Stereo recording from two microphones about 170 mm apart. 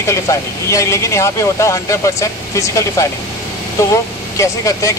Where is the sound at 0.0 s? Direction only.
15° left (ahead or behind).